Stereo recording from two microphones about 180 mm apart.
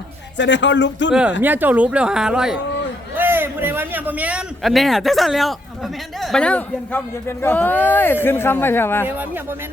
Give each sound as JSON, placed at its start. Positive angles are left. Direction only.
{"t": 0.3, "sound": "speech", "side_deg": 85}
{"t": 1.4, "sound": "a man's voice", "side_deg": -10}
{"t": 9.0, "sound": "speech", "side_deg": -10}